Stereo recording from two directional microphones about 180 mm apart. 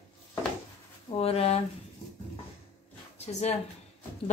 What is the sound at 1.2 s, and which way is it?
Speech, 35° left (ahead or behind).